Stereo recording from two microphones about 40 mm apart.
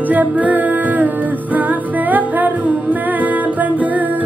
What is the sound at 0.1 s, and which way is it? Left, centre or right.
Music, right.